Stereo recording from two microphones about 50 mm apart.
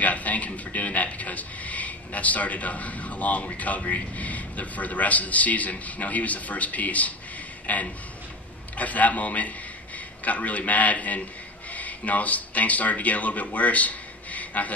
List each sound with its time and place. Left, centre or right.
0.0 s a man's voice: left